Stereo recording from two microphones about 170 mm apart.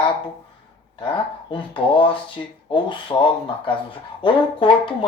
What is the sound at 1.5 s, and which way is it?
Speech, 30° left (ahead or behind).